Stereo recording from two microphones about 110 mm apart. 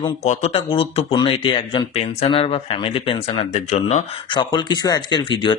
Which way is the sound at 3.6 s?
90° left.